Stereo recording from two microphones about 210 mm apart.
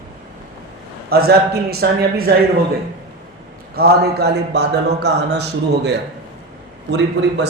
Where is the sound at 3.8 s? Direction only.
50° right (ahead or behind).